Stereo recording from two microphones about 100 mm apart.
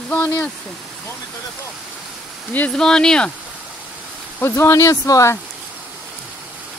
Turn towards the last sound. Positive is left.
turn(degrees=35)  # may be behind; listen again after turning